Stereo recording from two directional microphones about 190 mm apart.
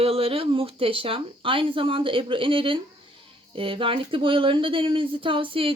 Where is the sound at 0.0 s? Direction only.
30° right (ahead or behind).